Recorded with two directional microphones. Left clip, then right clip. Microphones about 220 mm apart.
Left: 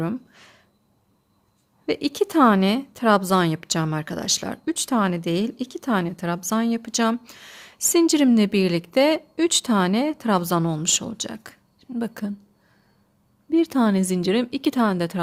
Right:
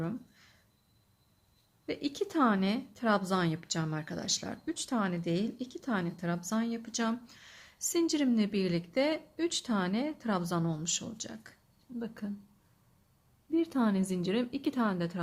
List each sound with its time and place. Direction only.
0.0 s a sound: 50° left (ahead or behind)
1.9 s speech: 50° left (ahead or behind)
13.5 s speech: 45° left (ahead or behind)